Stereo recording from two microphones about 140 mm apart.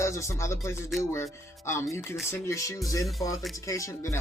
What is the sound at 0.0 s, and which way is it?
Speech, 20° left (ahead or behind).